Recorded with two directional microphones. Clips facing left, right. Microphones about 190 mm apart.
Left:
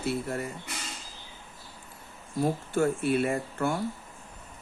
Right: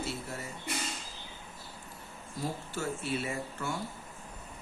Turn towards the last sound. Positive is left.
turn(degrees=55)  # may be behind; listen again after turning